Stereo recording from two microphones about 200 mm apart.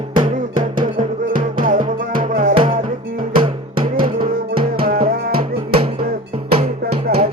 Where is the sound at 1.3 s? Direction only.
45° right (ahead or behind).